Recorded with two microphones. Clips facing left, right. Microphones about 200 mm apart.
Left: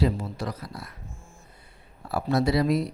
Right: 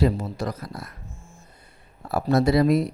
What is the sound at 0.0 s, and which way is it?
Speech, 45° right (ahead or behind).